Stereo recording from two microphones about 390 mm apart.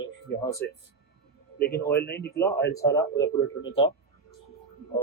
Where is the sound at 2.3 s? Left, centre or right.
Centre.